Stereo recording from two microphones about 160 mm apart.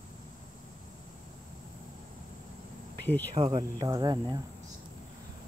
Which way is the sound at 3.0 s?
10° left (ahead or behind).